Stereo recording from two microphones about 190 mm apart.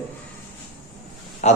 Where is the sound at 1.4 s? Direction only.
35° left (ahead or behind).